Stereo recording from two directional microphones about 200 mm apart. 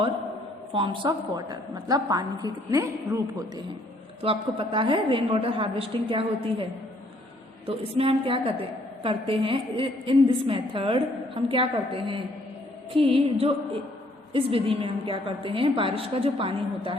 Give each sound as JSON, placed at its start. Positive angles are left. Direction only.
{"t": 0.8, "sound": "a woman's voice", "side_deg": -20}
{"t": 4.2, "sound": "a woman's voice", "side_deg": -25}
{"t": 7.7, "sound": "a woman's voice", "side_deg": -25}
{"t": 14.3, "sound": "a woman's voice", "side_deg": -25}